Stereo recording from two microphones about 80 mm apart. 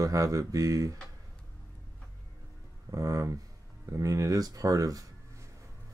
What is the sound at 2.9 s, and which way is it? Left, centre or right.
Speech, right.